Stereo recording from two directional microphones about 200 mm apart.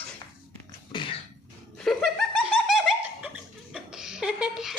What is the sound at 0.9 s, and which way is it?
Cough, 25° left (ahead or behind).